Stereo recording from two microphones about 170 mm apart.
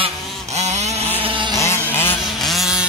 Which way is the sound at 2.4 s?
Centre (ahead or behind).